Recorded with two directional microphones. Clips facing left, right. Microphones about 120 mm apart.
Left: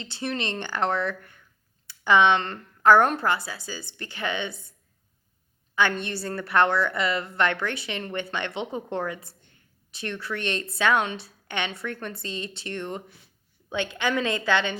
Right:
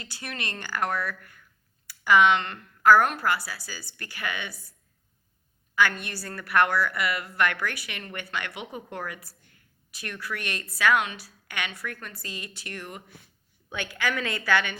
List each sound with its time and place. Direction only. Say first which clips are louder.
0.0 s a woman's voice: left 7 dB; 25° left (ahead or behind)
5.7 s a woman's voice: left 1 dB; 25° left (ahead or behind)